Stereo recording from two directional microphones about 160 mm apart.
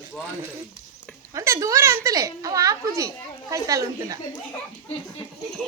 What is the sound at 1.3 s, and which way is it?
Speech, 20° right (ahead or behind).